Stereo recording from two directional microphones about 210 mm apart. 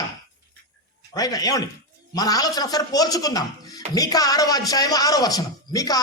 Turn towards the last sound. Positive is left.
turn(degrees=15)  # may be behind; listen again after turning